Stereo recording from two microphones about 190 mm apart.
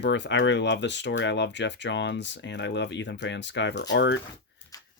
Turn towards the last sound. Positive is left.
turn(degrees=70)  # may be behind; listen again after turning